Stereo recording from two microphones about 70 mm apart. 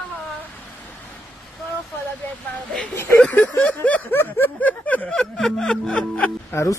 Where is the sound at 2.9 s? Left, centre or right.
Left.